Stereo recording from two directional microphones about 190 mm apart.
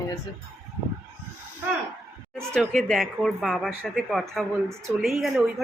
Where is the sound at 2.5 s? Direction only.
5° left (ahead or behind).